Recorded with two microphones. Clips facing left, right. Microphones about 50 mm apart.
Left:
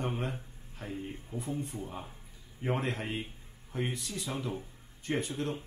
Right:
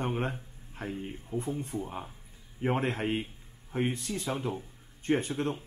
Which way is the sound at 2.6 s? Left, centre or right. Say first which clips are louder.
Right 4 dB; right.